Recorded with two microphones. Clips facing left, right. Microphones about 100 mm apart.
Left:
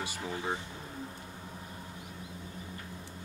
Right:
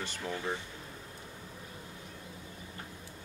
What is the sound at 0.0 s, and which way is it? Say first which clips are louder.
Speech: even; 10° left (ahead or behind).